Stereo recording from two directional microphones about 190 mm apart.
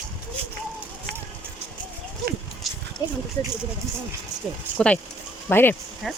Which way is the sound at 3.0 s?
20° left (ahead or behind).